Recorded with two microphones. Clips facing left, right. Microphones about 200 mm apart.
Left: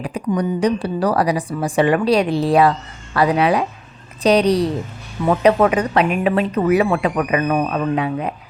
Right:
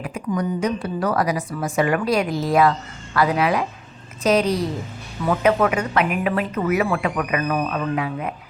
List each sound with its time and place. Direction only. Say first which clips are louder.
0.0 s a woman's voice: left 4 dB; 30° left (ahead or behind)
4.4 s a woman's voice: left 6 dB; 70° left (ahead or behind)
5.2 s speech: left 4 dB; 30° left (ahead or behind)